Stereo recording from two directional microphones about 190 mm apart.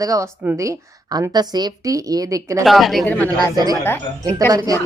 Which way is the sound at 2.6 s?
Centre (ahead or behind).